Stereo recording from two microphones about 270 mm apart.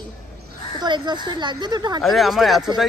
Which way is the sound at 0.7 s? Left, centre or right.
Centre.